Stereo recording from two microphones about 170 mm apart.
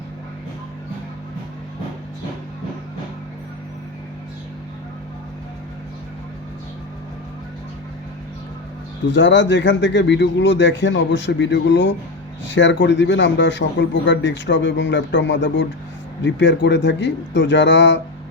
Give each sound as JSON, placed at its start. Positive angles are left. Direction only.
{"t": 9.0, "sound": "a man's voice", "side_deg": 90}